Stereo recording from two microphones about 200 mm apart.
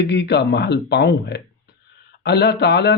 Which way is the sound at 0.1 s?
60° left (ahead or behind).